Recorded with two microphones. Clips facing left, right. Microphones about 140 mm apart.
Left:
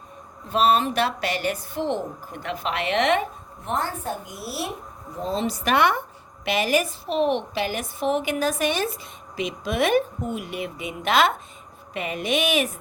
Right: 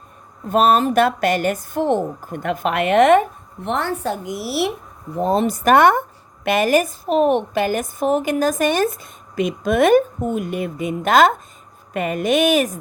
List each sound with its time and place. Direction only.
0.4 s speech: 50° right (ahead or behind)
3.7 s a woman's voice: 70° right (ahead or behind)
5.1 s speech: 60° right (ahead or behind)